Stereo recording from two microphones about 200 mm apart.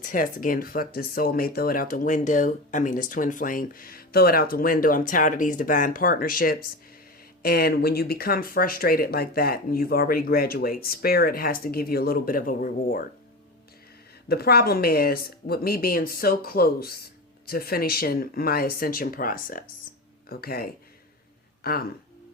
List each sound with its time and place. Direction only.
0.0 s speech: 40° left (ahead or behind)
14.3 s speech: 50° left (ahead or behind)